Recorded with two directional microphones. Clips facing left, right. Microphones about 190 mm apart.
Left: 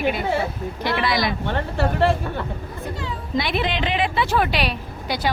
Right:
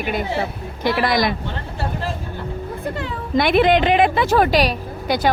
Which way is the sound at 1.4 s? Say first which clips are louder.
Left 5 dB; 65° left (ahead or behind).